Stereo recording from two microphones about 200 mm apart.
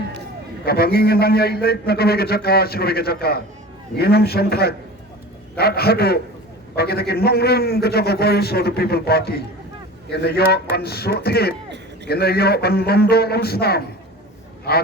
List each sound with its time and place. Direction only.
0.6 s a man's voice: 50° left (ahead or behind)